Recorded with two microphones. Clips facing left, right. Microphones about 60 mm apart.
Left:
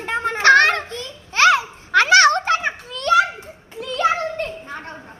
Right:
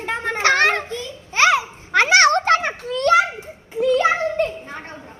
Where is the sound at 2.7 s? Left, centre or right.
Right.